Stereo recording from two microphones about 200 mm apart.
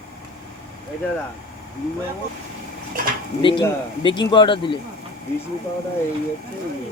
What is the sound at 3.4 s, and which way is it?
Speech, 25° left (ahead or behind).